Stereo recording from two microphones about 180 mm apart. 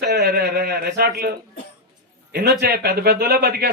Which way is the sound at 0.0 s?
65° right (ahead or behind).